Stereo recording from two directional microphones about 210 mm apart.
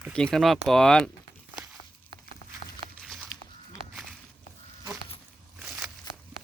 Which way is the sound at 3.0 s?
Centre (ahead or behind).